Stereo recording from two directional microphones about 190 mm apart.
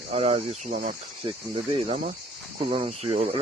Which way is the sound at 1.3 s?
25° right (ahead or behind).